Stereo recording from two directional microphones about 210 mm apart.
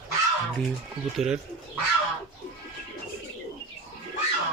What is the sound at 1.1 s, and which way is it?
Speech, 5° right (ahead or behind).